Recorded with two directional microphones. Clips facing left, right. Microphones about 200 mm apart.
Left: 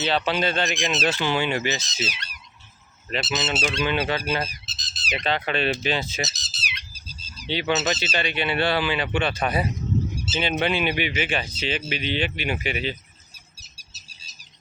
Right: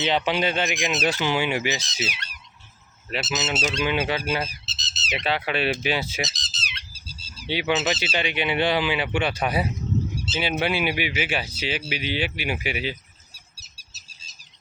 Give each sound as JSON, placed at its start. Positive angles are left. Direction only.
{"t": 0.0, "sound": "speech", "side_deg": -15}
{"t": 3.1, "sound": "goose", "side_deg": -5}
{"t": 4.6, "sound": "frog", "side_deg": -25}
{"t": 5.1, "sound": "speech", "side_deg": -10}
{"t": 6.2, "sound": "squawk", "side_deg": 5}
{"t": 7.3, "sound": "speech", "side_deg": -10}